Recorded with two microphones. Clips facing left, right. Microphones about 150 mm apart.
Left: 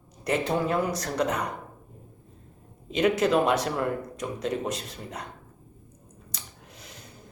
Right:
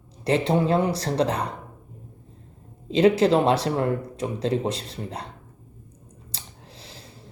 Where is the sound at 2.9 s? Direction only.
30° right (ahead or behind).